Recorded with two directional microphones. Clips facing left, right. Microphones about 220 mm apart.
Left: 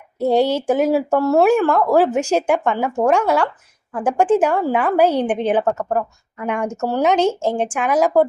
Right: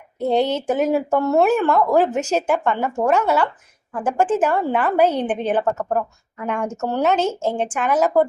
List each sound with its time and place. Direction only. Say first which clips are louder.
0.2 s a woman's voice: left 3 dB; 10° left (ahead or behind)